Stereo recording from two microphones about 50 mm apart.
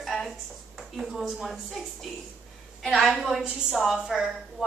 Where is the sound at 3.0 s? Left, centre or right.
Centre.